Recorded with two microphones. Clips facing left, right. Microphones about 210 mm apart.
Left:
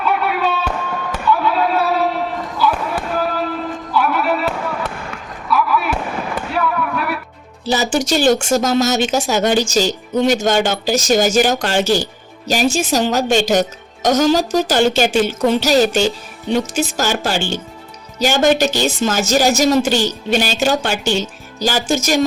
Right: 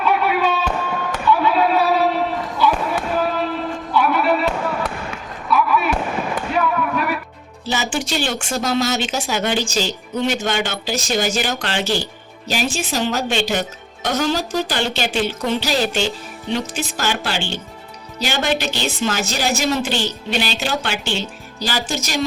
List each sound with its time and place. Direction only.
0.0 s a sound: centre (ahead or behind)
2.6 s fireworks: centre (ahead or behind)
3.9 s music: centre (ahead or behind)
5.5 s fireworks: centre (ahead or behind)
7.6 s speech: 40° left (ahead or behind)